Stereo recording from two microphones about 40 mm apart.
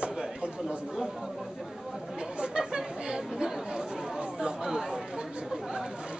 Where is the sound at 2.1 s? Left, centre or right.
Right.